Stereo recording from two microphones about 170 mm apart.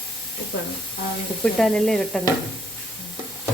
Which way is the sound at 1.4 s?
Centre (ahead or behind).